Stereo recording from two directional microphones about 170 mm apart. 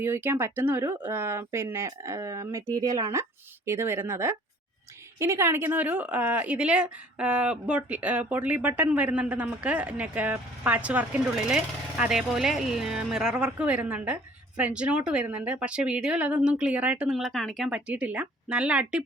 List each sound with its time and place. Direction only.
0.0 s a woman's voice: 15° right (ahead or behind)